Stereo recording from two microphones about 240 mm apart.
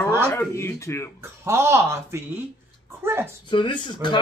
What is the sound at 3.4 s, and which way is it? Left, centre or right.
Speech, centre.